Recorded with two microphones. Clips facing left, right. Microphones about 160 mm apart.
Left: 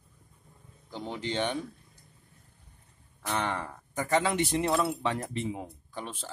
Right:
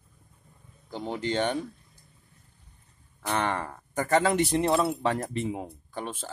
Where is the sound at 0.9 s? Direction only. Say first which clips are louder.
Right 4 dB; 45° right (ahead or behind).